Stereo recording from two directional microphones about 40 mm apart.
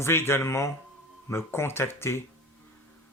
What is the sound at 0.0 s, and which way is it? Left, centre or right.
Speech, left.